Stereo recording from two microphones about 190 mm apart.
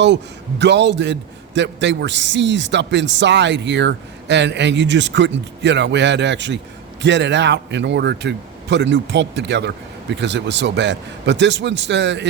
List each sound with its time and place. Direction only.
0.6 s a man's voice: 65° right (ahead or behind)